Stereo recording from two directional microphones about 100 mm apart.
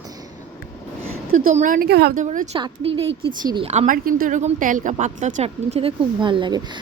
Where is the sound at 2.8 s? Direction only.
55° right (ahead or behind).